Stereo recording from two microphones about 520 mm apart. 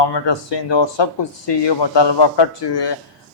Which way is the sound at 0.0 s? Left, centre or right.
Left.